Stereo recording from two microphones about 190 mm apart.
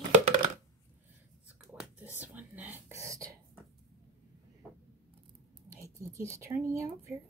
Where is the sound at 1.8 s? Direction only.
5° right (ahead or behind).